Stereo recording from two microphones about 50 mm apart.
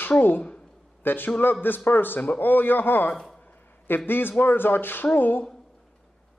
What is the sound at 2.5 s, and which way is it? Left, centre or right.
A man's voice, left.